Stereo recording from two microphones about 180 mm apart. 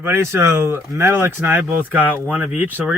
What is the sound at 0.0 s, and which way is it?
A man's voice, 15° right (ahead or behind).